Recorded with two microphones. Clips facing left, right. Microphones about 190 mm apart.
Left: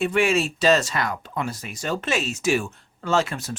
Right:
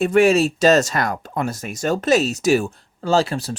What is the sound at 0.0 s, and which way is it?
Speech, 40° right (ahead or behind).